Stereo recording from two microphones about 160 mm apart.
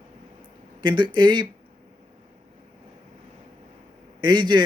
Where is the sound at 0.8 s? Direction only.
30° right (ahead or behind).